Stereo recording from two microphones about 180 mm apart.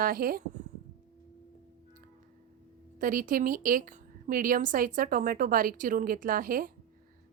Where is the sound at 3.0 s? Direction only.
50° right (ahead or behind).